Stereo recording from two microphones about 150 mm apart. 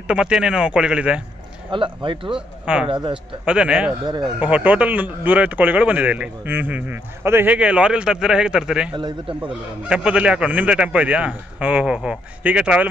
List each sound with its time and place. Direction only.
0.1 s speech: 5° right (ahead or behind)
1.7 s speech: 35° right (ahead or behind)
2.3 s speech: 5° right (ahead or behind)
2.9 s speech: 35° right (ahead or behind)
3.4 s speech: 5° right (ahead or behind)
4.0 s speech: 30° right (ahead or behind)
4.4 s speech: 10° right (ahead or behind)
8.9 s speech: 30° right (ahead or behind)
9.8 s speech: 5° right (ahead or behind)